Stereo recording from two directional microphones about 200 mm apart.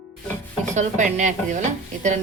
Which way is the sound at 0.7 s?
35° right (ahead or behind).